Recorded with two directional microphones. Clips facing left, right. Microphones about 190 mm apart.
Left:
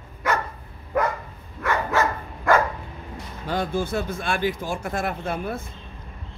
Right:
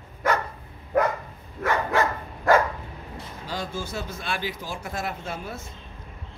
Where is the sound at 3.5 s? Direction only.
55° left (ahead or behind).